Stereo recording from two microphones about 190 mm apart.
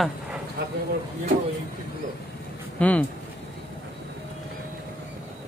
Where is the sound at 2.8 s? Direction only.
5° left (ahead or behind).